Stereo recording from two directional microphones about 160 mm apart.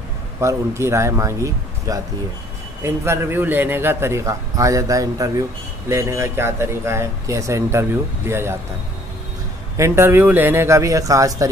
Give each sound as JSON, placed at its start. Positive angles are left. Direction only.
{"t": 0.4, "sound": "speech", "side_deg": -15}
{"t": 9.8, "sound": "speech", "side_deg": -15}